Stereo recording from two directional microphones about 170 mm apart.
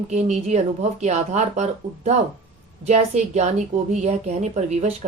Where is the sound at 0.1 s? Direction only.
40° right (ahead or behind).